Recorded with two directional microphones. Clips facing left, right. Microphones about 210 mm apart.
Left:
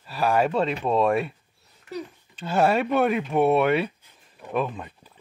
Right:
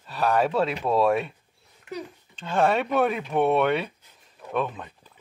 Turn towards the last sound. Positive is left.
turn(degrees=5)  # may be behind; listen again after turning